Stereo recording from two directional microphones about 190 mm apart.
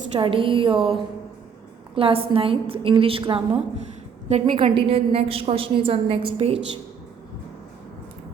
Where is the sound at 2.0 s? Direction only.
30° right (ahead or behind).